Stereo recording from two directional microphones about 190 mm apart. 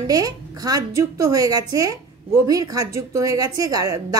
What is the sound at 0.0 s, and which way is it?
A woman's voice, 20° right (ahead or behind).